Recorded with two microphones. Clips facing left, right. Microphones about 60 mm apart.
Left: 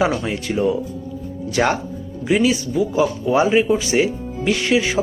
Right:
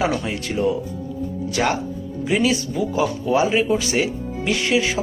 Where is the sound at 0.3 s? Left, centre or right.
Left.